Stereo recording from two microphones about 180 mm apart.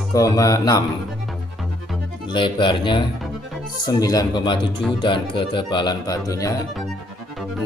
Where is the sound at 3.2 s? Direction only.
Centre (ahead or behind).